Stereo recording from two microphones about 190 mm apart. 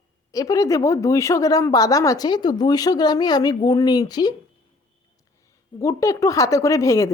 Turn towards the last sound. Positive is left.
turn(degrees=15)  # may be behind; listen again after turning